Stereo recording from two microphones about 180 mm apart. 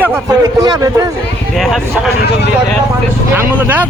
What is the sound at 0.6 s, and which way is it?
Speech, 20° right (ahead or behind).